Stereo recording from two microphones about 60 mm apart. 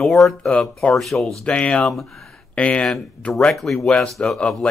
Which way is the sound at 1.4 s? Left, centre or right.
Left.